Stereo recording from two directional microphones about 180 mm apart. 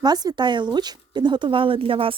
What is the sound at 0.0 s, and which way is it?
Speech, 20° right (ahead or behind).